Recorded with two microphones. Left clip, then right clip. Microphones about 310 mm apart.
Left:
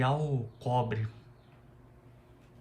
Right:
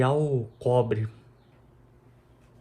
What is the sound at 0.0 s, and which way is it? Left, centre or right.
Speech, centre.